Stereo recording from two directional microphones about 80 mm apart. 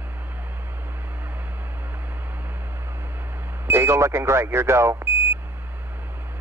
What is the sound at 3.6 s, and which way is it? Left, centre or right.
Speech, right.